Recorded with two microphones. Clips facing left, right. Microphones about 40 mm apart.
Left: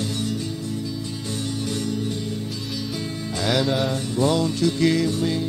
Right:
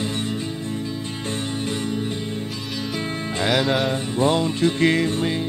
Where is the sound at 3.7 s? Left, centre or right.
Centre.